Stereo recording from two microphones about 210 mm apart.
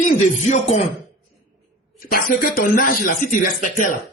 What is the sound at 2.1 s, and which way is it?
Speech, 40° left (ahead or behind).